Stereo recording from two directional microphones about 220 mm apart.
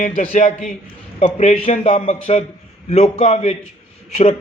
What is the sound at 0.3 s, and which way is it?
A man's voice, 35° left (ahead or behind).